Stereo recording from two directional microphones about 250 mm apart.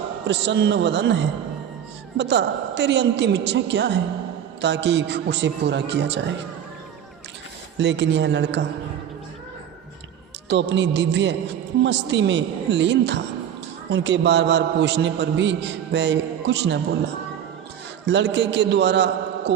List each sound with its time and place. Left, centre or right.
0.3 s a man's voice: right
7.8 s a man's voice: right
10.5 s a man's voice: right
18.0 s a man's voice: right